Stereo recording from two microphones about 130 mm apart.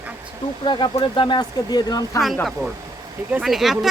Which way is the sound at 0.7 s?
35° left (ahead or behind).